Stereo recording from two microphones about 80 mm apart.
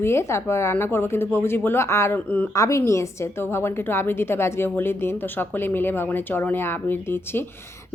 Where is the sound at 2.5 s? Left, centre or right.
Left.